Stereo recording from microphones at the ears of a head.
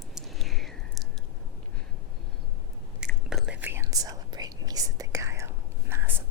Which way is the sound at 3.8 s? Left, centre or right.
Right.